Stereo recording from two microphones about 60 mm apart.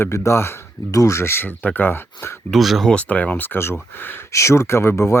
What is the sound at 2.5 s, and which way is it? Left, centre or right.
Speech, centre.